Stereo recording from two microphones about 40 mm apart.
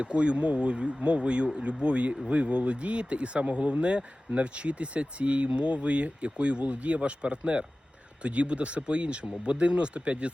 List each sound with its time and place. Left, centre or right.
0.0 s speech: right